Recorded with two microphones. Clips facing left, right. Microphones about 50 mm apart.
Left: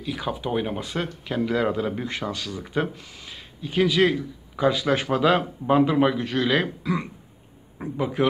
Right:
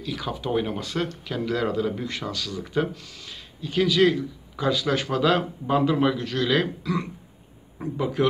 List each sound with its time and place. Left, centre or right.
0.0 s speech: centre